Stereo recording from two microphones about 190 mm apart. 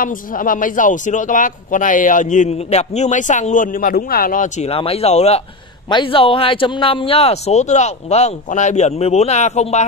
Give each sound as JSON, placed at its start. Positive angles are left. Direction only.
{"t": 0.0, "sound": "a man's voice", "side_deg": 45}